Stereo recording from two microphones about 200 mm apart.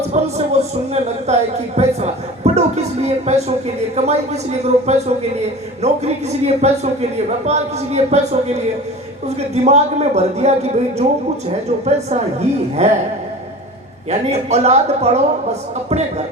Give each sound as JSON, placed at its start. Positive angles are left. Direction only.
{"t": 0.1, "sound": "a woman's voice", "side_deg": -35}
{"t": 14.1, "sound": "a woman's voice", "side_deg": -35}